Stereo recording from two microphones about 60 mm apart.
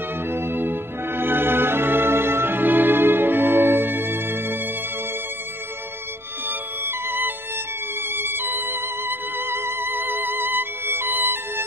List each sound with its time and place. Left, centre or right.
0.3 s music: right
7.1 s music: right